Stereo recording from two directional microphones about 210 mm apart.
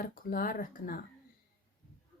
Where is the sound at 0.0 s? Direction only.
45° left (ahead or behind).